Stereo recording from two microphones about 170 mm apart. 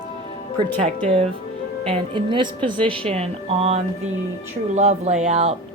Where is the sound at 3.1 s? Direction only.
35° right (ahead or behind).